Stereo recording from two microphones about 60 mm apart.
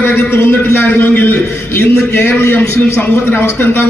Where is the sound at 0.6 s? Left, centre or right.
Left.